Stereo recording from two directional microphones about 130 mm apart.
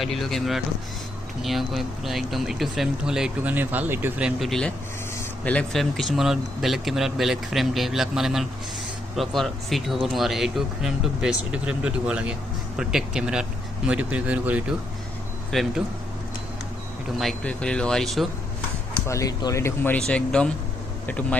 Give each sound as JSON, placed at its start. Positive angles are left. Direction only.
{"t": 0.0, "sound": "speech", "side_deg": 0}
{"t": 4.4, "sound": "speech", "side_deg": 5}
{"t": 15.5, "sound": "speech", "side_deg": 5}
{"t": 17.2, "sound": "speech", "side_deg": 5}
{"t": 19.0, "sound": "speech", "side_deg": 25}
{"t": 20.0, "sound": "speech", "side_deg": 5}